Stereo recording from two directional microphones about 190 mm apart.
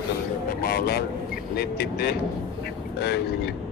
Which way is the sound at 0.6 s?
55° left (ahead or behind).